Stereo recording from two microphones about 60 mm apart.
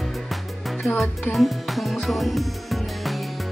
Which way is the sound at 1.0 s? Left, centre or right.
Centre.